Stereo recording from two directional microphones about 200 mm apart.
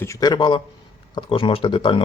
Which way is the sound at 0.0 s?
15° left (ahead or behind).